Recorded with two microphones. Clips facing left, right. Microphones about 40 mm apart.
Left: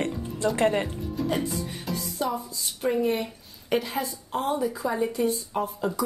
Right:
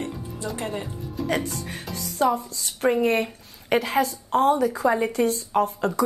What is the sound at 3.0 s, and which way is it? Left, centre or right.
A woman's voice, right.